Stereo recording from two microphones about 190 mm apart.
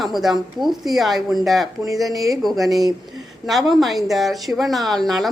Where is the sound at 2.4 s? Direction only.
Centre (ahead or behind).